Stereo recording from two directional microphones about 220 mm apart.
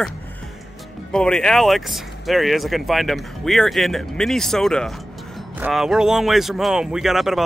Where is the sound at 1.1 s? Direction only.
5° left (ahead or behind).